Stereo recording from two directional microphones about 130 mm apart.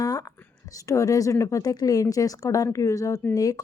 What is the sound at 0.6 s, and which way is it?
Speech, 25° left (ahead or behind).